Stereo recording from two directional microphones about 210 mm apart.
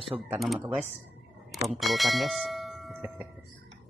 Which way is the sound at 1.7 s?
Centre (ahead or behind).